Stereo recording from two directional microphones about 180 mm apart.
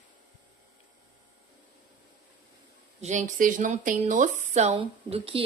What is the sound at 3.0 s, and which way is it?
A woman's voice, 40° right (ahead or behind).